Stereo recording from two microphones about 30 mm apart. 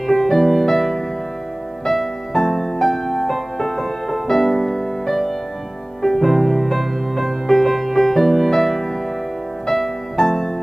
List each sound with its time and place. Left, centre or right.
0.0 s music: centre